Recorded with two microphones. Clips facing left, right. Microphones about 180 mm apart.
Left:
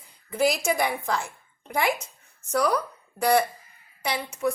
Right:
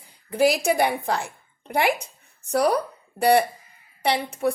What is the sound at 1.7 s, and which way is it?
Speech, 60° right (ahead or behind).